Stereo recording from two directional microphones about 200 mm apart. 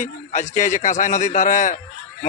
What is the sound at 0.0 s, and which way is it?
A man's voice, 35° left (ahead or behind).